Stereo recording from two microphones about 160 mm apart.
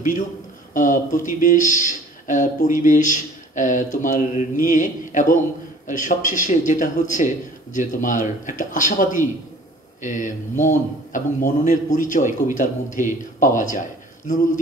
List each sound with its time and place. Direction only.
0.7 s speech: 55° left (ahead or behind)